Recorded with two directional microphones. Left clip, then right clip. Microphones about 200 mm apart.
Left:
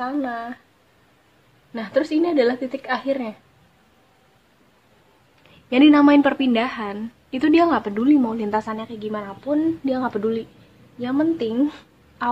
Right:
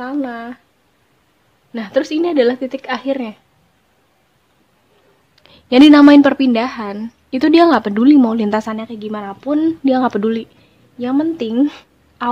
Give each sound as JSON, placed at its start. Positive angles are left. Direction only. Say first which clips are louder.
{"t": 0.0, "sound": "a woman's voice", "louder": "right 2 dB", "side_deg": -45}
{"t": 1.7, "sound": "a woman's voice", "louder": "right 4 dB", "side_deg": -50}
{"t": 5.4, "sound": "a woman's voice", "louder": "right 7 dB", "side_deg": -55}